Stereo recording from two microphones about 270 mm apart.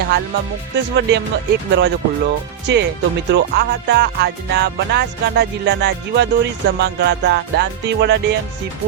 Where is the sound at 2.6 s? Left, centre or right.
Right.